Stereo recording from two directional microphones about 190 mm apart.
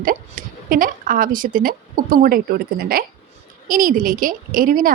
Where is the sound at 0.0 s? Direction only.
45° right (ahead or behind).